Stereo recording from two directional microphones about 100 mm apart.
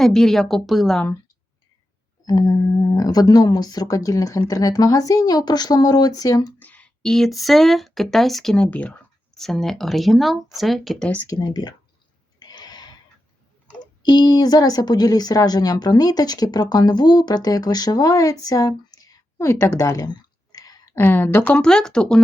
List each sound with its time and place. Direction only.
0.0 s speech: 5° left (ahead or behind)
2.2 s speech: 40° left (ahead or behind)
6.6 s speech: 15° left (ahead or behind)
11.3 s speech: 45° left (ahead or behind)
12.5 s a sound: 45° left (ahead or behind)
14.0 s speech: 45° left (ahead or behind)
20.1 s clicking: 40° left (ahead or behind)
20.9 s speech: 20° left (ahead or behind)